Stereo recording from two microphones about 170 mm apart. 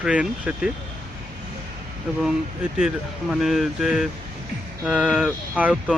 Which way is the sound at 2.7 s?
Centre (ahead or behind).